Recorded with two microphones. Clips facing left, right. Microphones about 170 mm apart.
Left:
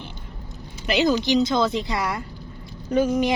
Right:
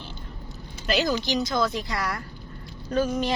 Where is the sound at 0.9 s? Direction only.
20° left (ahead or behind).